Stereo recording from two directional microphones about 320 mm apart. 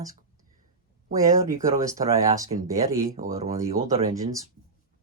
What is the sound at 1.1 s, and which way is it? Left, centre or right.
Speech, centre.